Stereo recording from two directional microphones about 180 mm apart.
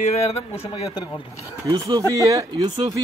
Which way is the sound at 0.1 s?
35° left (ahead or behind).